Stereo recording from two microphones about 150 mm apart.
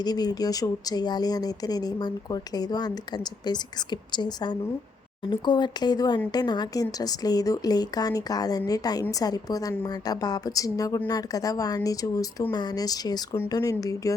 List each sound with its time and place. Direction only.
0.0 s speech: 25° left (ahead or behind)
4.1 s speech: 30° left (ahead or behind)